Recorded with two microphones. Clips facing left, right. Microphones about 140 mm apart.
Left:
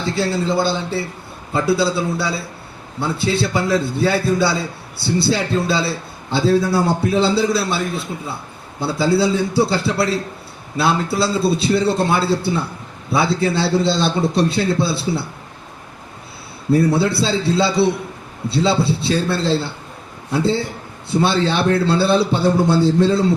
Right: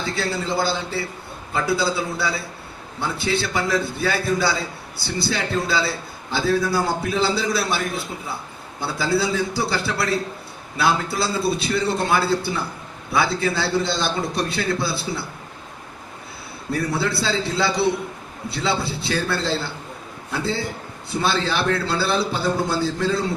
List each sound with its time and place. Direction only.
0.2 s a man's voice: 25° left (ahead or behind)
8.8 s a man's voice: 25° left (ahead or behind)
16.7 s a man's voice: 30° left (ahead or behind)